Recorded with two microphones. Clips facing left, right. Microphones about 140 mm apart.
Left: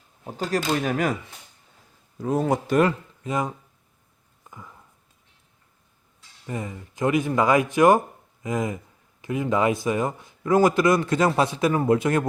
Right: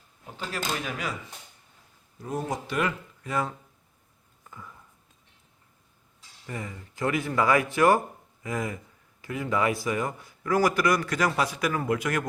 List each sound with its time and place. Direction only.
0.3 s speech: 40° left (ahead or behind)
2.1 s speech: 90° left
2.6 s speech: 40° left (ahead or behind)
3.2 s a man's voice: 20° left (ahead or behind)
6.5 s a man's voice: 20° left (ahead or behind)